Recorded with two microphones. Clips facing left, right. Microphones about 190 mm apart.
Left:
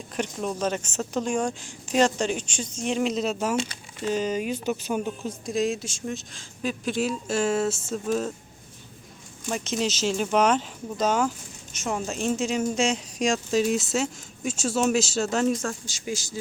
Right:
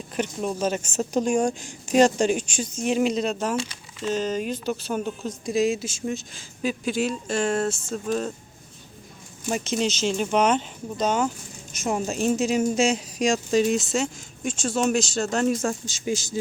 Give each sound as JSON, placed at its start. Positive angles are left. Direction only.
{"t": 0.2, "sound": "a woman's voice", "side_deg": -5}
{"t": 5.5, "sound": "speech", "side_deg": 0}
{"t": 9.5, "sound": "speech", "side_deg": 0}
{"t": 11.8, "sound": "speech", "side_deg": -15}
{"t": 15.9, "sound": "speech", "side_deg": -20}